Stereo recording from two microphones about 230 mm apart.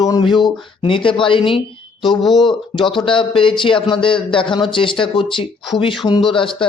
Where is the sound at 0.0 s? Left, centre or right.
Centre.